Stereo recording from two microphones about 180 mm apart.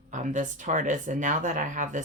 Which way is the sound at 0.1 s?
45° right (ahead or behind).